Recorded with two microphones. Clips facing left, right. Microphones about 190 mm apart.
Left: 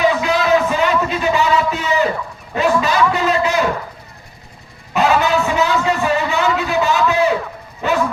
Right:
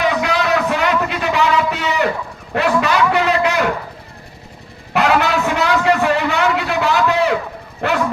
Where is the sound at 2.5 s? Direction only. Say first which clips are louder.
Even; 65° right (ahead or behind).